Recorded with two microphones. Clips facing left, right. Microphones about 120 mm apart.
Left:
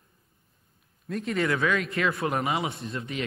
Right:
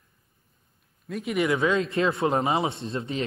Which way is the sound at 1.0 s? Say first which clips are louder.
Even; 5° right (ahead or behind).